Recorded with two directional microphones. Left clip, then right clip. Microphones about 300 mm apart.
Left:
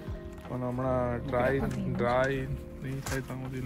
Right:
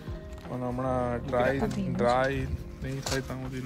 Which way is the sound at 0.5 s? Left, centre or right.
Centre.